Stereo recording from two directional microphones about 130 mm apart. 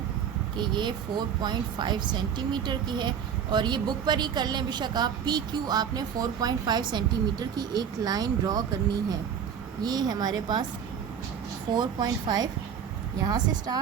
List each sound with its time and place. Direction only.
0.5 s a woman's voice: 35° right (ahead or behind)
9.8 s a woman's voice: 30° right (ahead or behind)
11.7 s a woman's voice: 35° right (ahead or behind)